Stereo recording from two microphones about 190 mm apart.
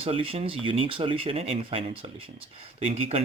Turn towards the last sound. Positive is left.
turn(degrees=-35)  # may be behind; listen again after turning